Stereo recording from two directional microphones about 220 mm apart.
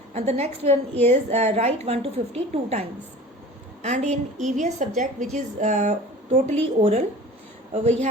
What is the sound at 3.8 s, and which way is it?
A woman's voice, 30° right (ahead or behind).